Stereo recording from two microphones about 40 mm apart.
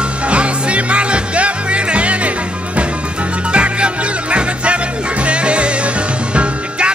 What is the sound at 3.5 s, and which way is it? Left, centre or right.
Music, right.